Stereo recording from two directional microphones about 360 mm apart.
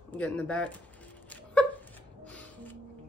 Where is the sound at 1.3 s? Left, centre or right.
Centre.